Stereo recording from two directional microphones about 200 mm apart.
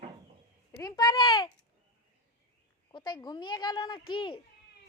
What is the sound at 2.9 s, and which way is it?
A child's voice, 25° left (ahead or behind).